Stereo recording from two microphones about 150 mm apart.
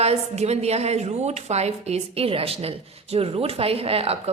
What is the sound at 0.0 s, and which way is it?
A woman's voice, 45° right (ahead or behind).